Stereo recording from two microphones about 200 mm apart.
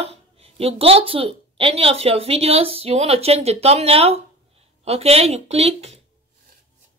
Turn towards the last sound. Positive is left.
turn(degrees=-30)  # may be behind; listen again after turning